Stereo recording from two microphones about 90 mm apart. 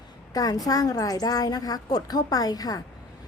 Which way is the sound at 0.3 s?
45° left (ahead or behind).